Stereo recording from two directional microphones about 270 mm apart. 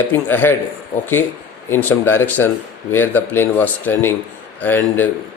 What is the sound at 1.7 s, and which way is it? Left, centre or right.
Speech, centre.